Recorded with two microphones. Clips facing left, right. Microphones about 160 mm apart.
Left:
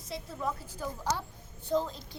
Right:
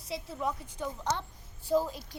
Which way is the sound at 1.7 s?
10° right (ahead or behind).